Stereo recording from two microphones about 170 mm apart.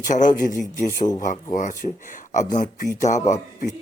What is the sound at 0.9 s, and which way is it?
Speech, 20° left (ahead or behind).